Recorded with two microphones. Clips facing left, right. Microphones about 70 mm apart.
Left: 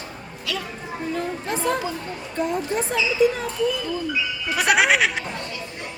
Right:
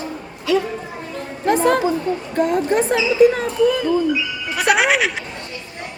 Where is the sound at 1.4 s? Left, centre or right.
Right.